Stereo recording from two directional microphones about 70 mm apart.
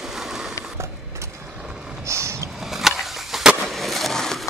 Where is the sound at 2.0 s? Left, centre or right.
Right.